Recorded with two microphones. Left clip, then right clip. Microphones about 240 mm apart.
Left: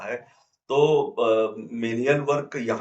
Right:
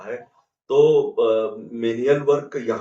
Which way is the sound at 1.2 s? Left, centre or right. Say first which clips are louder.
Right 2 dB; left.